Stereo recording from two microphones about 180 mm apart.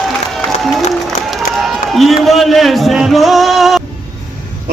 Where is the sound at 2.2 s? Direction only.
Centre (ahead or behind).